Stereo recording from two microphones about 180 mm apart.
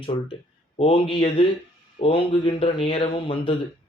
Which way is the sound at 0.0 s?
30° left (ahead or behind).